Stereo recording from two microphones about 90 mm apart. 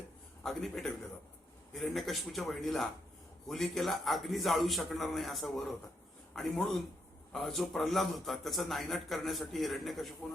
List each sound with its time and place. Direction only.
0.4 s a man's voice: 5° left (ahead or behind)